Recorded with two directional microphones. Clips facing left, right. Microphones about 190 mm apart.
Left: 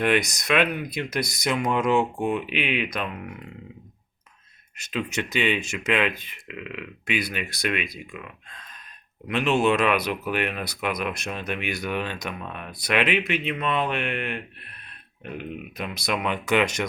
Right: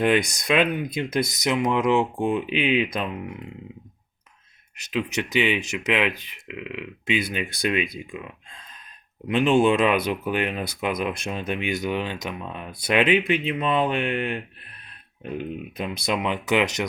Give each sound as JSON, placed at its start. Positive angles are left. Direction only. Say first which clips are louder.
{"t": 0.0, "sound": "speech", "louder": "right 2 dB", "side_deg": -30}
{"t": 2.2, "sound": "speech", "louder": "right 3 dB", "side_deg": -30}
{"t": 4.8, "sound": "speech", "louder": "right 2 dB", "side_deg": -15}
{"t": 7.1, "sound": "speech", "louder": "right 3 dB", "side_deg": -25}
{"t": 9.2, "sound": "speech", "louder": "right 3 dB", "side_deg": -30}
{"t": 15.8, "sound": "speech", "louder": "right 2 dB", "side_deg": -25}